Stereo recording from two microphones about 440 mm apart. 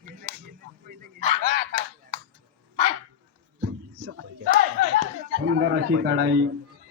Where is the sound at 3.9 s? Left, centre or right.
Right.